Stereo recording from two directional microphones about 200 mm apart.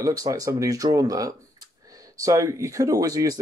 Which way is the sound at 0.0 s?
20° right (ahead or behind).